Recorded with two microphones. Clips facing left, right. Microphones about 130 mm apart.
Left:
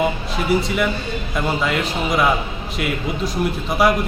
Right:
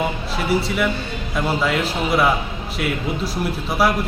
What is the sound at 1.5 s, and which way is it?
Speech, 5° right (ahead or behind).